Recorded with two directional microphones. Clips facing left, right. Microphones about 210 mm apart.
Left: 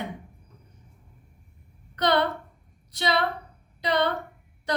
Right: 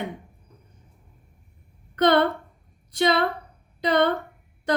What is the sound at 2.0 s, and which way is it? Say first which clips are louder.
A woman's voice: right 5 dB; 55° right (ahead or behind).